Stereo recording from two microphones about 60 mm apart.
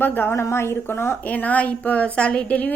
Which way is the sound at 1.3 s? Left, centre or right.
Left.